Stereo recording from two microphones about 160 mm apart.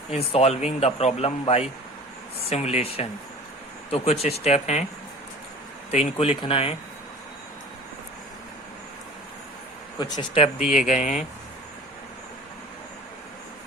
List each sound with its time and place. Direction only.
0.1 s speech: 40° left (ahead or behind)
5.9 s speech: 40° left (ahead or behind)
10.0 s speech: 30° left (ahead or behind)
10.7 s speech: 50° left (ahead or behind)